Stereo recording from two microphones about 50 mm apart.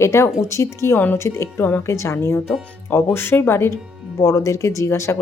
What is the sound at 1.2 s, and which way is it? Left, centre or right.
Speech, left.